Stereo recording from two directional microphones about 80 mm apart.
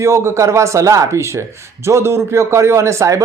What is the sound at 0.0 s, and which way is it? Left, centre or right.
Speech, right.